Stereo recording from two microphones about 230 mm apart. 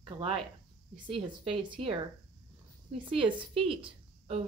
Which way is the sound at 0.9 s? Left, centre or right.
Right.